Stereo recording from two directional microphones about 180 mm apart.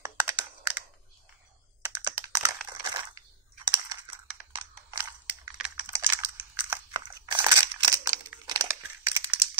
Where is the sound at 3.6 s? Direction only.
20° right (ahead or behind).